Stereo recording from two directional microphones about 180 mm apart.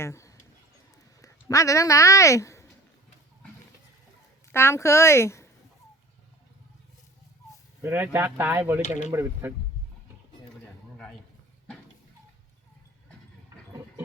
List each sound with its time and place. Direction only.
0.0 s a sound: 15° left (ahead or behind)
1.2 s speech: 20° left (ahead or behind)
4.5 s a woman's voice: 15° left (ahead or behind)
7.8 s speech: 10° right (ahead or behind)